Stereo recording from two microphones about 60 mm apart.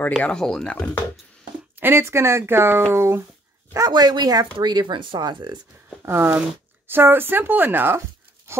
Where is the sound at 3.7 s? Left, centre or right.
Right.